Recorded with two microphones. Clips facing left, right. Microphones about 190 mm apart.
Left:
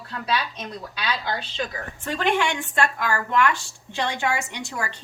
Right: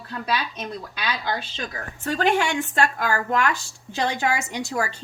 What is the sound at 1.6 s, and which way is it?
Speech, 40° right (ahead or behind).